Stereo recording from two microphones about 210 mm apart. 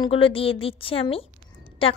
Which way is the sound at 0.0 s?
25° left (ahead or behind).